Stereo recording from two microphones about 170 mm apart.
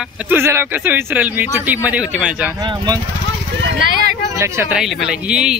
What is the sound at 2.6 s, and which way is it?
Speech, 25° right (ahead or behind).